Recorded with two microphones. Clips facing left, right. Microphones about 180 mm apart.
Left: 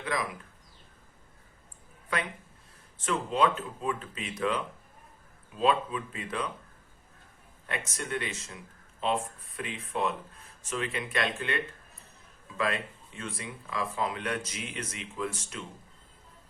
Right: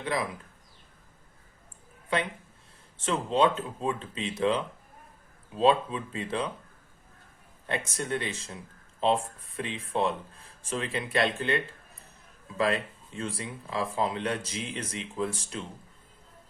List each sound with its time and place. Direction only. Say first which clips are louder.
0.0 s speech: right 2 dB; 30° right (ahead or behind)
3.0 s speech: right 2 dB; 30° right (ahead or behind)
7.9 s speech: right 3 dB; 30° right (ahead or behind)